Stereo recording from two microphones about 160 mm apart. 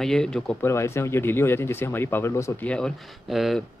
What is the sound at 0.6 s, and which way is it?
Speech, 15° left (ahead or behind).